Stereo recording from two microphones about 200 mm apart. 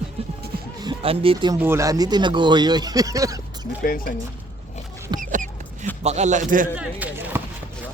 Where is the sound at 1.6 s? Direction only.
15° right (ahead or behind).